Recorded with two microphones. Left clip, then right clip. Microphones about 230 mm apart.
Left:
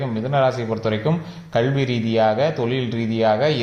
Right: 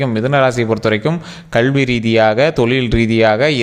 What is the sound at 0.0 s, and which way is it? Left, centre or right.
Speech, right.